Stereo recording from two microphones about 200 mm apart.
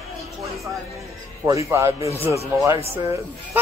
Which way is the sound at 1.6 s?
15° right (ahead or behind).